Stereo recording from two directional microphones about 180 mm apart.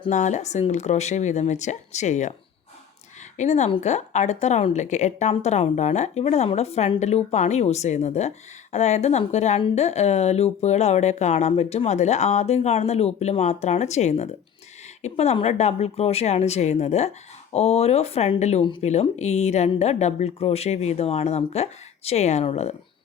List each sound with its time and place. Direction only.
0.1 s speech: 40° left (ahead or behind)
3.3 s speech: 40° left (ahead or behind)